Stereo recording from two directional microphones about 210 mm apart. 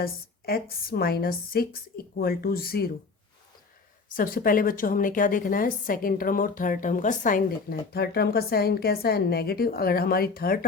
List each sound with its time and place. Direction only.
0.0 s a woman's voice: 45° left (ahead or behind)
4.1 s a woman's voice: 40° left (ahead or behind)